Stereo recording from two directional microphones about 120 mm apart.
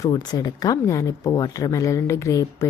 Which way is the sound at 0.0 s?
35° left (ahead or behind).